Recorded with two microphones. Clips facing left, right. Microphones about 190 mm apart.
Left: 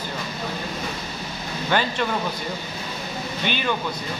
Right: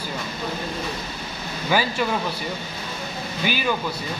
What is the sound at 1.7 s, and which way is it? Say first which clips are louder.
Speech: right 1 dB; 5° right (ahead or behind).